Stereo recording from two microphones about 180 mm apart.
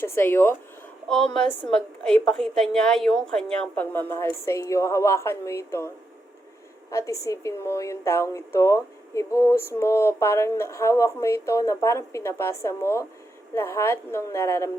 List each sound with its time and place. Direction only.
0.0 s a woman's voice: 10° left (ahead or behind)
6.9 s a woman's voice: 15° left (ahead or behind)